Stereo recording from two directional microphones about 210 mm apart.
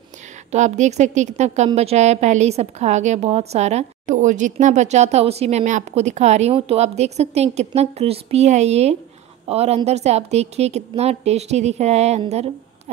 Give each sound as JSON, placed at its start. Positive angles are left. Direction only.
{"t": 0.5, "sound": "a woman's voice", "side_deg": -35}